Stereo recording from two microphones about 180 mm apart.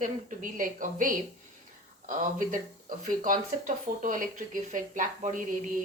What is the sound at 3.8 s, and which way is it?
Speech, 45° right (ahead or behind).